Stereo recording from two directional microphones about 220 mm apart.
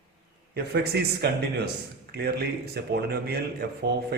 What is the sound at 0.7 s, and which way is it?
Speech, 45° right (ahead or behind).